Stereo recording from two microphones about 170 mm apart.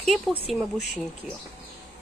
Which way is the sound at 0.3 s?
Centre (ahead or behind).